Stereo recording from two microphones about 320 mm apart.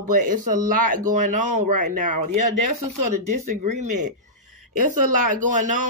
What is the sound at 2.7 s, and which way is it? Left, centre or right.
Speech, right.